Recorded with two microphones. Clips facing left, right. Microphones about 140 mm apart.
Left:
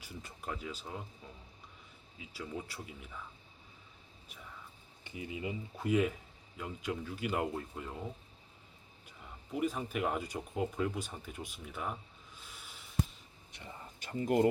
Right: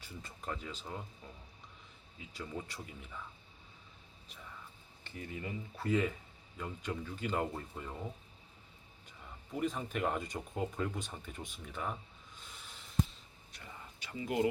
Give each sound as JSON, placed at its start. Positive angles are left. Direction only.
{"t": 0.0, "sound": "speech", "side_deg": 10}
{"t": 2.1, "sound": "speech", "side_deg": 5}
{"t": 5.0, "sound": "speech", "side_deg": 10}
{"t": 9.5, "sound": "speech", "side_deg": 5}
{"t": 12.4, "sound": "a sound", "side_deg": 5}
{"t": 14.0, "sound": "speech", "side_deg": 45}